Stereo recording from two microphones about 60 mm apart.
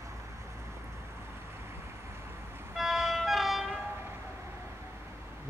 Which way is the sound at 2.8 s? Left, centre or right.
Centre.